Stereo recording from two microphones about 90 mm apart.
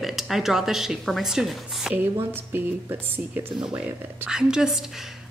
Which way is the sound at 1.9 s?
25° right (ahead or behind).